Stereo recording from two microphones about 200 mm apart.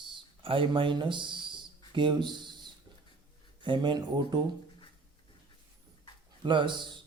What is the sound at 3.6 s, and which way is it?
Speech, 25° right (ahead or behind).